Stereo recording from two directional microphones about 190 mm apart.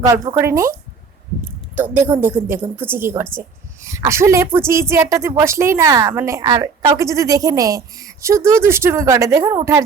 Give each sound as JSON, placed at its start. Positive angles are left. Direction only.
{"t": 0.0, "sound": "a woman's voice", "side_deg": -15}